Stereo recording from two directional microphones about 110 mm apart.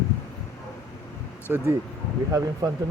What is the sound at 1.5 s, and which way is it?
Speech, 10° right (ahead or behind).